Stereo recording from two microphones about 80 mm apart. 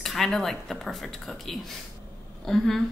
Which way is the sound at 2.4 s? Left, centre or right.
Centre.